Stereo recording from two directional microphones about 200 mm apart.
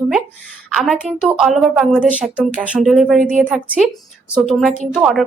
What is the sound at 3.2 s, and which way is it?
Speech, 40° right (ahead or behind).